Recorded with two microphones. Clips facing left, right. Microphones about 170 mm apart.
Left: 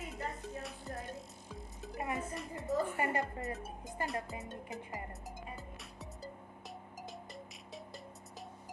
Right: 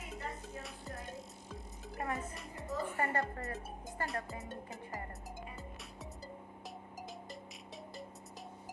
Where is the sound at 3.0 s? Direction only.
15° left (ahead or behind).